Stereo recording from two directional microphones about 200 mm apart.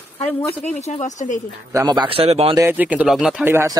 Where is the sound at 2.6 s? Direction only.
10° right (ahead or behind).